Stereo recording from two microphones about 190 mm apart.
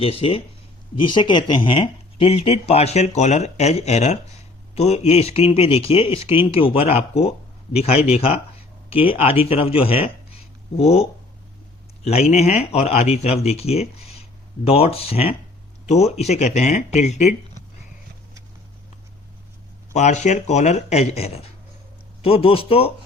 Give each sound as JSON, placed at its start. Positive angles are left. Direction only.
{"t": 0.0, "sound": "speech", "side_deg": 30}
{"t": 12.0, "sound": "speech", "side_deg": 35}
{"t": 19.9, "sound": "speech", "side_deg": 40}